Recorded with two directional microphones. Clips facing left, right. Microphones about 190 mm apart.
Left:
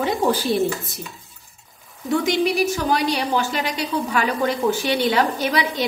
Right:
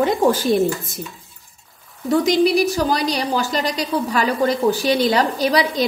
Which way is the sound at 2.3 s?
35° right (ahead or behind).